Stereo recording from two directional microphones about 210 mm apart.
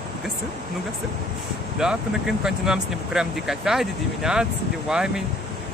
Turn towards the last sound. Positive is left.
turn(degrees=-5)  # may be behind; listen again after turning